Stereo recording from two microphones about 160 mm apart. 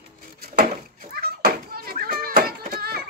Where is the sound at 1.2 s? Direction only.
70° right (ahead or behind).